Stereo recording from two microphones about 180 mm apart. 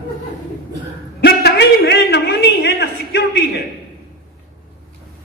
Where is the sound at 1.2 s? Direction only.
60° left (ahead or behind).